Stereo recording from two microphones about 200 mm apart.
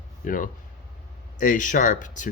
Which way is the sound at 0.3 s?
40° left (ahead or behind).